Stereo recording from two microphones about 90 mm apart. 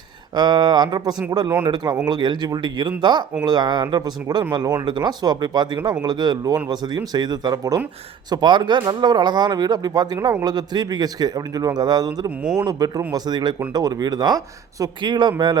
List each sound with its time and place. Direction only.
0.3 s a man's voice: 50° right (ahead or behind)
4.5 s a man's voice: 40° right (ahead or behind)
8.3 s a man's voice: 55° right (ahead or behind)